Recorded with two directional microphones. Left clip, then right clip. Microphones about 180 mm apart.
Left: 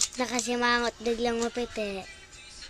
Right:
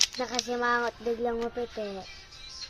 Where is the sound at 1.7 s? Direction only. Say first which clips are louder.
Left 3 dB; 10° left (ahead or behind).